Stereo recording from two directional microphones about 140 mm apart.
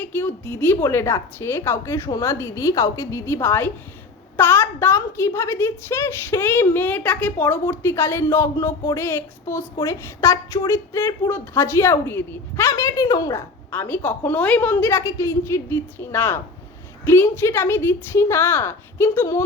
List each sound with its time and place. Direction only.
0.0 s a woman's voice: 15° left (ahead or behind)